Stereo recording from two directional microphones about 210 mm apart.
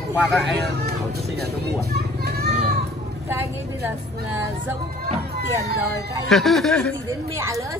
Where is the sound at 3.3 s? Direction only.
10° right (ahead or behind).